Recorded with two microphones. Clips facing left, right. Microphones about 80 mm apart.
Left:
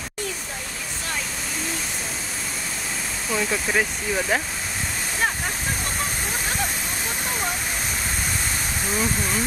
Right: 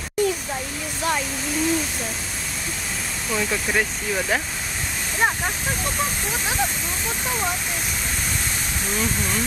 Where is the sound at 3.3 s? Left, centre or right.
Centre.